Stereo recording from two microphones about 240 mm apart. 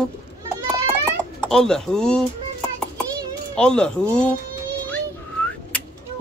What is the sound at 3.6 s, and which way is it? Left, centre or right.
Speech, centre.